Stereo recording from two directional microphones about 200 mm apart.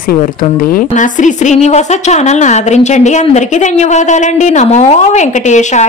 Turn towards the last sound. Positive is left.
turn(degrees=35)  # may be behind; listen again after turning